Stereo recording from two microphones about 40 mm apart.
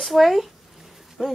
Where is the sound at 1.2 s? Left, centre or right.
Centre.